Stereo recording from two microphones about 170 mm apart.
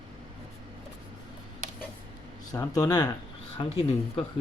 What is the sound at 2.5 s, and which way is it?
Speech, 20° left (ahead or behind).